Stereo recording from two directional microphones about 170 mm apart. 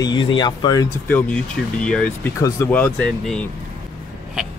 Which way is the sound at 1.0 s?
10° left (ahead or behind).